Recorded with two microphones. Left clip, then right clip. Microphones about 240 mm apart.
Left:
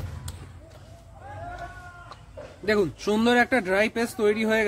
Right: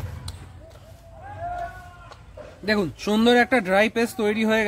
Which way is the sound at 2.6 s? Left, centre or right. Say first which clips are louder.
Even; right.